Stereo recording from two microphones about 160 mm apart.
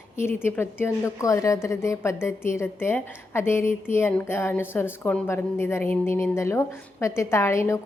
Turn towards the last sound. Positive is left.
turn(degrees=20)  # may be behind; listen again after turning